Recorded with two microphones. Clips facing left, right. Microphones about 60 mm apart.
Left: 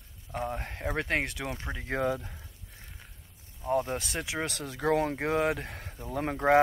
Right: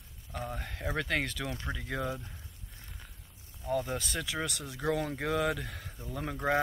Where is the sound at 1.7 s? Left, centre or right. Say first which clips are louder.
Left 6 dB; left.